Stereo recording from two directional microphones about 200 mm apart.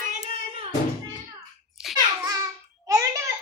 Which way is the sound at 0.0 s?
35° right (ahead or behind).